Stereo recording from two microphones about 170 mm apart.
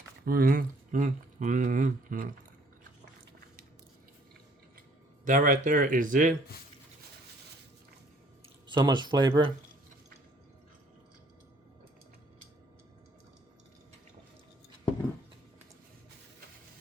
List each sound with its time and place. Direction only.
0.3 s speech: 60° right (ahead or behind)
5.2 s speech: 50° right (ahead or behind)
8.6 s speech: 25° right (ahead or behind)